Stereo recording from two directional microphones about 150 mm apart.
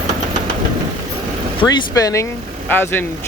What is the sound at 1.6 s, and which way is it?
Speech, 25° left (ahead or behind).